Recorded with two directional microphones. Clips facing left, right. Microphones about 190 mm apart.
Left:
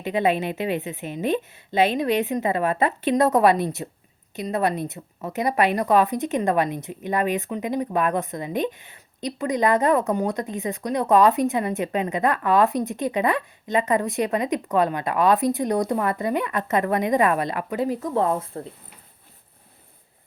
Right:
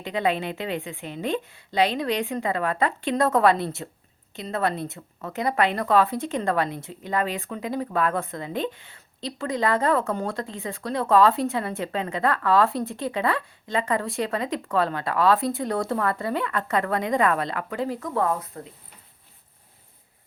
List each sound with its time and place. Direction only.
0.0 s a woman's voice: 20° left (ahead or behind)